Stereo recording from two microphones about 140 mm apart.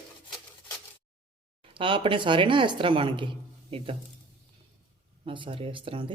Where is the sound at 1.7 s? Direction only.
35° right (ahead or behind).